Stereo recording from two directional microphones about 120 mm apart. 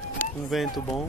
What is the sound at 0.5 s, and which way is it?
Speech, centre (ahead or behind).